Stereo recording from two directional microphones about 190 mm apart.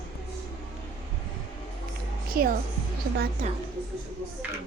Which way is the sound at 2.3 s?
50° right (ahead or behind).